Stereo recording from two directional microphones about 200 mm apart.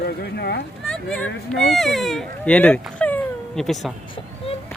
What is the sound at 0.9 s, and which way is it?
Speech, 5° left (ahead or behind).